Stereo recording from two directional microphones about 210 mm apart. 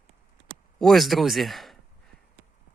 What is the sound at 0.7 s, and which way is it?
Speech, centre (ahead or behind).